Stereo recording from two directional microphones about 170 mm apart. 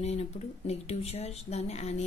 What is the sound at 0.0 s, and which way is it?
A woman's voice, 40° left (ahead or behind).